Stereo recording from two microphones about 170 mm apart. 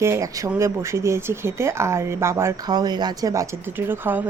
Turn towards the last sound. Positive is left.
turn(degrees=-10)  # may be behind; listen again after turning